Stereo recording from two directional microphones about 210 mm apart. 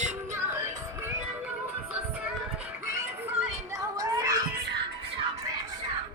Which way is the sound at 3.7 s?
15° right (ahead or behind).